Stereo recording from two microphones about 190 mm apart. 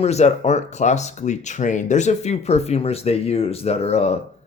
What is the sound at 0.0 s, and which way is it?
Speech, 35° left (ahead or behind).